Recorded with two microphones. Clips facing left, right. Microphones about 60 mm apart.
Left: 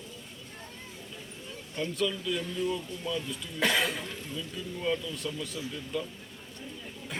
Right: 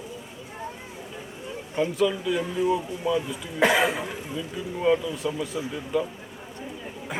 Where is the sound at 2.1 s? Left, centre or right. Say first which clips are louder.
Right 6 dB; centre.